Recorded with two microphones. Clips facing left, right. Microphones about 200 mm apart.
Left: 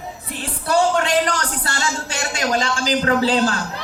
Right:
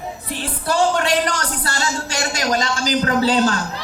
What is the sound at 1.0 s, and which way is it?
A man's voice, 40° right (ahead or behind).